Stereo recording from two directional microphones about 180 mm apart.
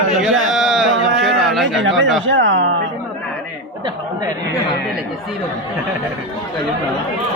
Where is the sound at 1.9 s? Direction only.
Centre (ahead or behind).